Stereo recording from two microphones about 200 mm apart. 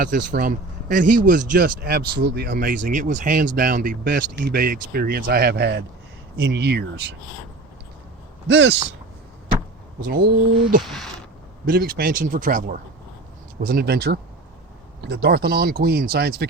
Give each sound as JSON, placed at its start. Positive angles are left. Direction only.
{"t": 0.0, "sound": "speech", "side_deg": -45}
{"t": 8.4, "sound": "speech", "side_deg": -60}
{"t": 10.6, "sound": "speech", "side_deg": -45}
{"t": 10.8, "sound": "a sound", "side_deg": 0}
{"t": 11.7, "sound": "speech", "side_deg": -50}